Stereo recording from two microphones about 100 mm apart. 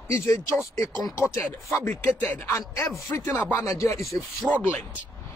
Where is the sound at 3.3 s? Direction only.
20° left (ahead or behind).